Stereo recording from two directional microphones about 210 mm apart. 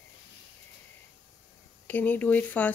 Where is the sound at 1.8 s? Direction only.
10° left (ahead or behind).